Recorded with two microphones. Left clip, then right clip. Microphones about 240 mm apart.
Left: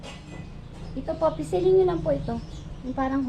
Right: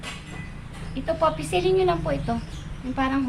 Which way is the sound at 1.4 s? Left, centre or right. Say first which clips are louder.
Left 1 dB; right.